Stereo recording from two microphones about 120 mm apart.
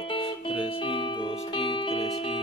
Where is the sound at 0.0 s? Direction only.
45° left (ahead or behind).